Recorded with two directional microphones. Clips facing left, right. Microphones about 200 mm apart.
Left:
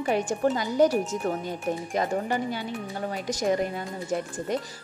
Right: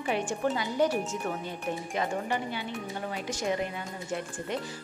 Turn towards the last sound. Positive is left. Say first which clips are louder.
# left 5 dB
turn(degrees=40)  # may be behind; listen again after turning